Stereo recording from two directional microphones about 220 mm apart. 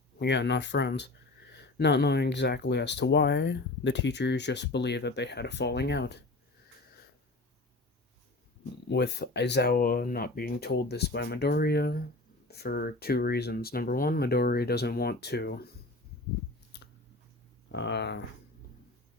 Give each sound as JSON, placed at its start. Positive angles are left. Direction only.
{"t": 0.2, "sound": "speech", "side_deg": 50}
{"t": 8.9, "sound": "speech", "side_deg": 50}
{"t": 17.7, "sound": "speech", "side_deg": 50}